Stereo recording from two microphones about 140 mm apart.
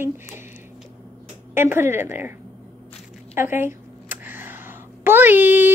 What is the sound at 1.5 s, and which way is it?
Speech, 15° right (ahead or behind).